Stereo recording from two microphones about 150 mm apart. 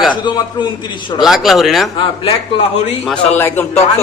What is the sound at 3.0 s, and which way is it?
Speech, 5° left (ahead or behind).